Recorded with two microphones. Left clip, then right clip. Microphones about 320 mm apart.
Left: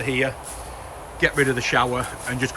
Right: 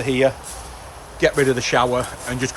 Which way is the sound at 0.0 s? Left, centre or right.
Centre.